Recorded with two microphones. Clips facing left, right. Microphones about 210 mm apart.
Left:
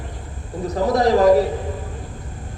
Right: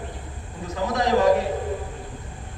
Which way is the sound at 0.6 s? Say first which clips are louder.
Left 7 dB; 35° left (ahead or behind).